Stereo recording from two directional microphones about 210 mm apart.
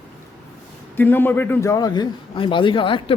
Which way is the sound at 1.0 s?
10° left (ahead or behind).